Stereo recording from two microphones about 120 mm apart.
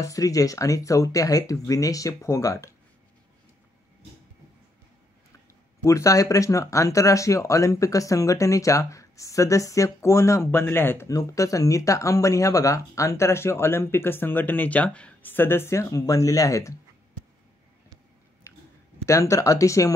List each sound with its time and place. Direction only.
0.0 s speech: 30° left (ahead or behind)
5.9 s speech: 25° left (ahead or behind)
19.0 s speech: 25° left (ahead or behind)